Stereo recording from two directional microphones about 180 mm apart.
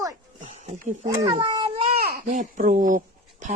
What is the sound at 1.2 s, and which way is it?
Cat, 25° right (ahead or behind).